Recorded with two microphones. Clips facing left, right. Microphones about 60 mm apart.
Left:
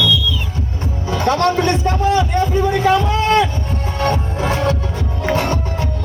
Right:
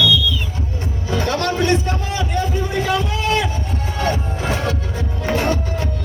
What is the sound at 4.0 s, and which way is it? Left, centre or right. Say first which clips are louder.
Music: left 3 dB; left.